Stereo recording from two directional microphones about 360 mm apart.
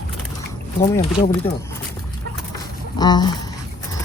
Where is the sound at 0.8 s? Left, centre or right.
Centre.